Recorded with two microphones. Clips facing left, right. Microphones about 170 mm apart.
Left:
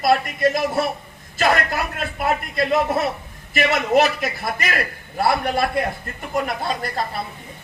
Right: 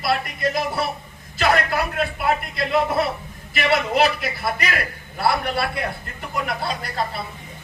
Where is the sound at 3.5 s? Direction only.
45° left (ahead or behind).